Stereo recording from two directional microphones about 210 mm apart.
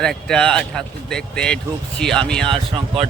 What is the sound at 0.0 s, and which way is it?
Speech, 5° left (ahead or behind).